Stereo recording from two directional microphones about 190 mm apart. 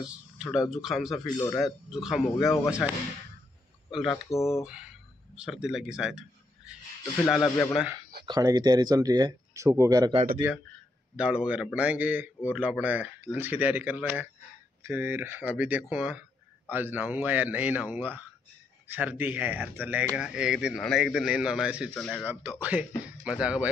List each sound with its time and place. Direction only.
0.0 s a sound: 5° right (ahead or behind)
0.7 s speech: centre (ahead or behind)
3.9 s speech: centre (ahead or behind)
4.3 s speech: 15° left (ahead or behind)
5.3 s a man's voice: 5° right (ahead or behind)
7.7 s speech: 5° right (ahead or behind)
8.3 s speech: 20° right (ahead or behind)
11.1 s a man's voice: 5° right (ahead or behind)
22.2 s a man's voice: 10° right (ahead or behind)